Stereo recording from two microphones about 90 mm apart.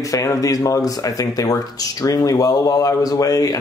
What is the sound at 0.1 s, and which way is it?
Speech, 40° left (ahead or behind).